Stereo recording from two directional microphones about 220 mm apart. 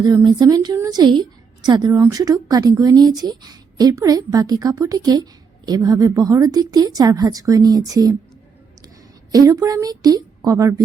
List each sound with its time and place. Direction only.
0.0 s a woman's voice: 20° right (ahead or behind)
9.3 s a woman's voice: 15° right (ahead or behind)